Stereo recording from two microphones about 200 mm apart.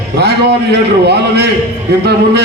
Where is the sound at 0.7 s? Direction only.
55° right (ahead or behind).